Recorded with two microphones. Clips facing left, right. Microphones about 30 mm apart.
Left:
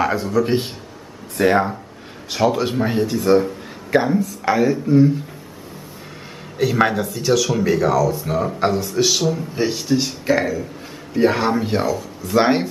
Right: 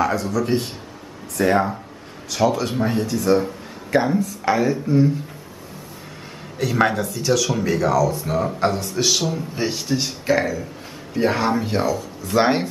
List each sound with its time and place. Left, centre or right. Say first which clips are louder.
0.0 s a man's voice: left 2 dB; left
3.3 s a man's voice: left 3 dB; centre
6.6 s speech: left 2 dB; centre